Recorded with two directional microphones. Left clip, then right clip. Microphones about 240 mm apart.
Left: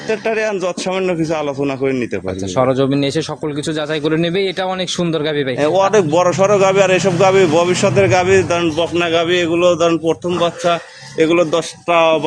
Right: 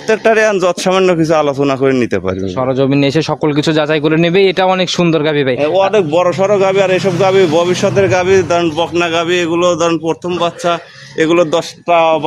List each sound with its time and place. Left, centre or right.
0.1 s a man's voice: right
2.6 s a man's voice: centre
5.5 s a man's voice: centre; by 11.6 s right
11.9 s speech: right